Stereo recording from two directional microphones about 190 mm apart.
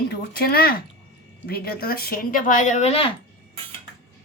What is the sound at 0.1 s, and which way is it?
Speech, 60° left (ahead or behind).